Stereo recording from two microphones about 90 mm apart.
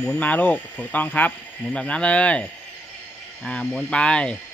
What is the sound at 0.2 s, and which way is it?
Speech, 15° left (ahead or behind).